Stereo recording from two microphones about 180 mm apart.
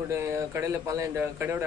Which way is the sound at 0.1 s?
15° right (ahead or behind).